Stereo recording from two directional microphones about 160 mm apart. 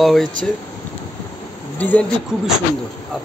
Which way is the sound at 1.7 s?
10° left (ahead or behind).